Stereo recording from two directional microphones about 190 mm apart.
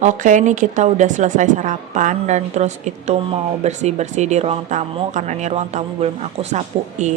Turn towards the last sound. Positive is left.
turn(degrees=-40)  # may be behind; listen again after turning